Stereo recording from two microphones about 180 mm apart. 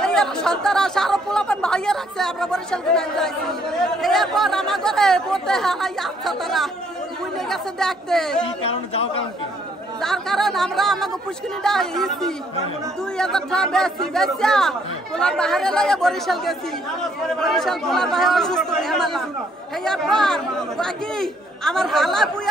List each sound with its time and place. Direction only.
0.0 s speech: 5° left (ahead or behind)
8.6 s speech: 30° left (ahead or behind)
10.0 s speech: centre (ahead or behind)